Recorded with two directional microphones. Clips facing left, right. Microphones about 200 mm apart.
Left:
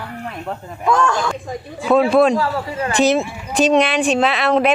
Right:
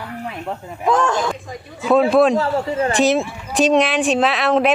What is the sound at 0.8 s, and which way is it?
Speech, 20° right (ahead or behind).